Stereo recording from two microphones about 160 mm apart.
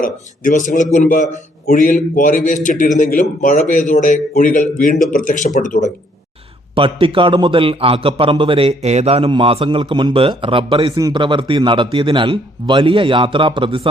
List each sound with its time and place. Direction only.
0.0 s a man's voice: 55° left (ahead or behind)
6.7 s a man's voice: 35° right (ahead or behind)